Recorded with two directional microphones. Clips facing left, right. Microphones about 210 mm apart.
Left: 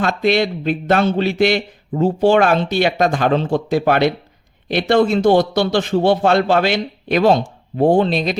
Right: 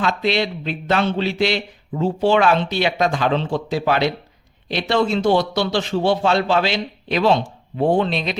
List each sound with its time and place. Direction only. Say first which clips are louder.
0.0 s speech: left 4 dB; 50° left (ahead or behind)